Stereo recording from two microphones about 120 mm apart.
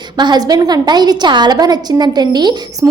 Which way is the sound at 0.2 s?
35° right (ahead or behind).